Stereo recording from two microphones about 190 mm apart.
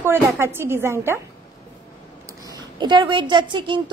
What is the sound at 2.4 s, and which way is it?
Speech, 20° right (ahead or behind).